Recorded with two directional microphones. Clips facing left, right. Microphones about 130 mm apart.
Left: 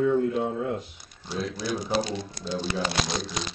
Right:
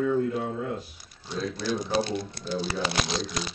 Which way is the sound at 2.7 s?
Centre (ahead or behind).